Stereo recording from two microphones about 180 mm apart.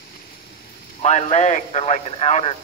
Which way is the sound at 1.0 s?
40° left (ahead or behind).